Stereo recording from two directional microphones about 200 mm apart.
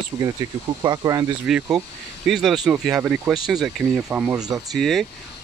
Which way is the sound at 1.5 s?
Centre (ahead or behind).